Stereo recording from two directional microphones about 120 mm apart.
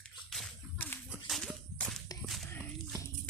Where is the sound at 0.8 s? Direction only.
15° left (ahead or behind).